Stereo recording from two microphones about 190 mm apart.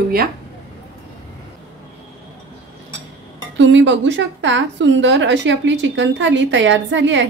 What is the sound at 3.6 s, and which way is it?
A woman's voice, 75° right (ahead or behind).